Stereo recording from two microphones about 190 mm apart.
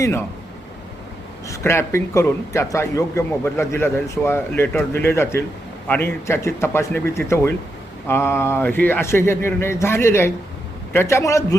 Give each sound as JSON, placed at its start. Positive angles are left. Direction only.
{"t": 0.0, "sound": "a man's voice", "side_deg": 15}
{"t": 1.5, "sound": "a man's voice", "side_deg": 15}